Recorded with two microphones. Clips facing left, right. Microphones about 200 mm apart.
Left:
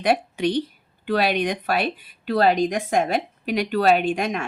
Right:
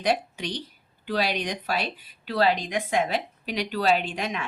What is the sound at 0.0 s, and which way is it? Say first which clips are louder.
A woman's voice: left 5 dB; 55° left (ahead or behind).